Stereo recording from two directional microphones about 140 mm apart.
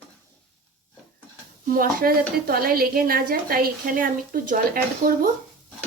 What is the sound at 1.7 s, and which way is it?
A woman's voice, 90° right.